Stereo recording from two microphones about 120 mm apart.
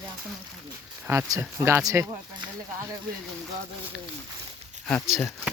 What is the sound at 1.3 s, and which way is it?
Speech, 25° right (ahead or behind).